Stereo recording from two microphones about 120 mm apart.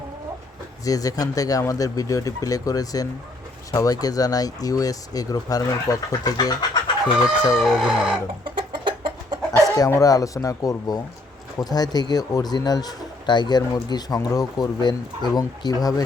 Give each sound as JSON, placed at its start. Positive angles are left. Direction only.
{"t": 0.9, "sound": "speech", "side_deg": 30}
{"t": 7.4, "sound": "speech", "side_deg": 0}
{"t": 8.4, "sound": "chicken", "side_deg": -40}
{"t": 9.5, "sound": "speech", "side_deg": 30}